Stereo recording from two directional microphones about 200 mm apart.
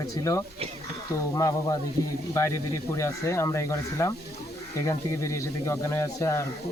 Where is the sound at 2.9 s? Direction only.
15° left (ahead or behind).